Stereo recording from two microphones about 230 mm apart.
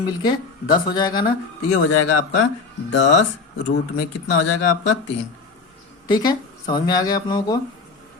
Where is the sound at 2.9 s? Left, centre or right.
Left.